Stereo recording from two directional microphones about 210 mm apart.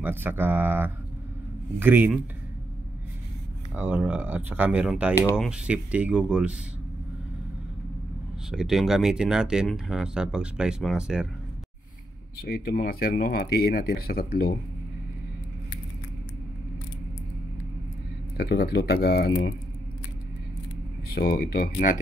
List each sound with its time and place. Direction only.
0.0 s speech: 10° right (ahead or behind)
3.7 s speech: 10° right (ahead or behind)
8.5 s speech: centre (ahead or behind)
12.4 s speech: 45° left (ahead or behind)
18.4 s speech: 55° left (ahead or behind)
21.1 s speech: 45° left (ahead or behind)